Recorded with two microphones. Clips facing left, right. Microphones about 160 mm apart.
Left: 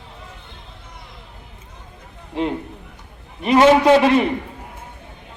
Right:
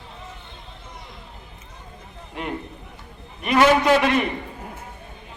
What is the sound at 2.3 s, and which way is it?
A man's voice, 25° left (ahead or behind).